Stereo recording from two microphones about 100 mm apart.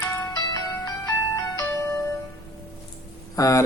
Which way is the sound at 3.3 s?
35° left (ahead or behind).